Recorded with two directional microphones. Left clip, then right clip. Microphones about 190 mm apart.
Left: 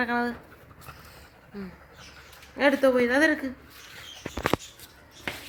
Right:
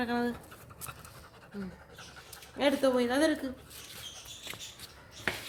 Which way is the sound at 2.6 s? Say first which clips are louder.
Left 6 dB; 15° left (ahead or behind).